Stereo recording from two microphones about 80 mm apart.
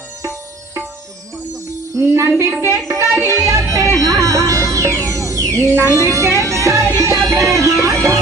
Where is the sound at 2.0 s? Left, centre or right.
Right.